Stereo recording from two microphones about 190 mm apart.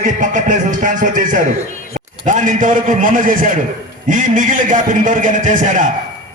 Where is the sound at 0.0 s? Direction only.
40° right (ahead or behind).